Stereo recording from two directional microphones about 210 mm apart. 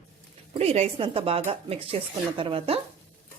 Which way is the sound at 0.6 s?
30° right (ahead or behind).